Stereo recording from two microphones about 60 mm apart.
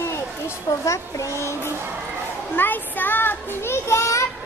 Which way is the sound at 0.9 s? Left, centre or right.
Left.